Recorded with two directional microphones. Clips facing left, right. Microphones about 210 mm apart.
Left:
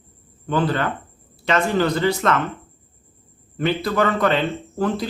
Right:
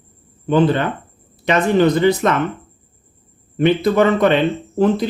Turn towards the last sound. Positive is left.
turn(degrees=-20)  # may be behind; listen again after turning